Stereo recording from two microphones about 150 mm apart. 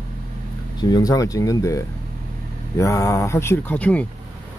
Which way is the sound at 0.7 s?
25° left (ahead or behind).